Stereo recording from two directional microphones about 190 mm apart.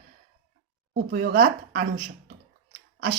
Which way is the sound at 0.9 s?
50° right (ahead or behind).